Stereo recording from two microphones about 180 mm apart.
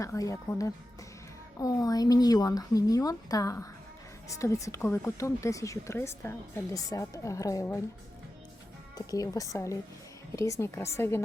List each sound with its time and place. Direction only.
0.0 s a woman's voice: 20° left (ahead or behind)
9.0 s a woman's voice: 20° left (ahead or behind)